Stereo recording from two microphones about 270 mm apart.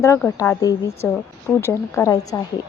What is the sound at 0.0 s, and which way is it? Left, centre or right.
Speech, centre.